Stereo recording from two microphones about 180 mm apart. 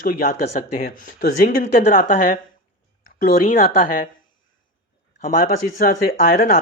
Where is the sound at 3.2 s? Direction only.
50° left (ahead or behind).